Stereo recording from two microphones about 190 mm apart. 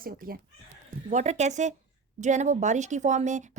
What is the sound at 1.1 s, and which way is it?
A woman's voice, 40° right (ahead or behind).